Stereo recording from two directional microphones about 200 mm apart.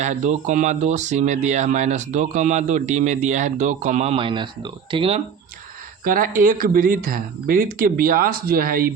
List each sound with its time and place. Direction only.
0.0 s speech: 35° right (ahead or behind)
6.1 s speech: 45° right (ahead or behind)